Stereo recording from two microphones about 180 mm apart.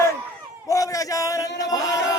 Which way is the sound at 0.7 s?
20° left (ahead or behind).